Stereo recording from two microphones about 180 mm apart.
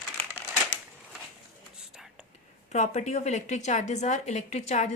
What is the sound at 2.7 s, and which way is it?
A woman's voice, 40° left (ahead or behind).